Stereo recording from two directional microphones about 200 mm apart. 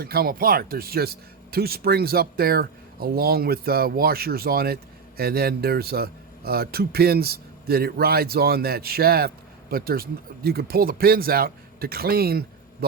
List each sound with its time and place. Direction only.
0.0 s speech: 50° right (ahead or behind)